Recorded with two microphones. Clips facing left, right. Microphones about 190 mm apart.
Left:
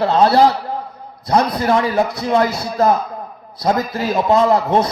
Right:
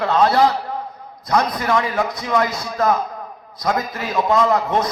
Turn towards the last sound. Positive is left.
turn(degrees=30)  # may be behind; listen again after turning